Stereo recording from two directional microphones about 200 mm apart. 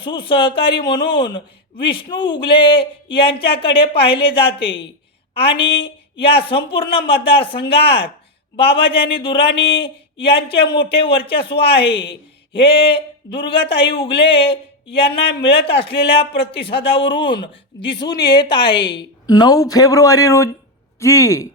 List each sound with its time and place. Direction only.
0.0 s a woman's voice: 25° left (ahead or behind)
11.7 s speech: 55° left (ahead or behind)
12.5 s speech: 25° left (ahead or behind)